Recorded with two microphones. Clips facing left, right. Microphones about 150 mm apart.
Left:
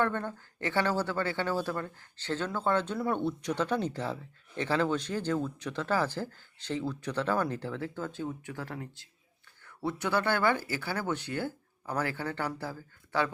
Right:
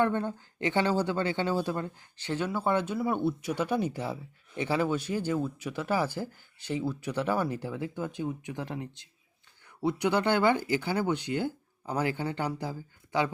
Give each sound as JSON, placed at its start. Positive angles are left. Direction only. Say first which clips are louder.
{"t": 0.0, "sound": "speech", "louder": "right 3 dB", "side_deg": -15}